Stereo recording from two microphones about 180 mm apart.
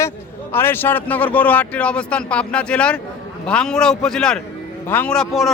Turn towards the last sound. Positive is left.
turn(degrees=0)  # may be behind; listen again after turning